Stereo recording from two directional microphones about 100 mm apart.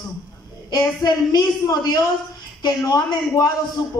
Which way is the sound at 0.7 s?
45° left (ahead or behind).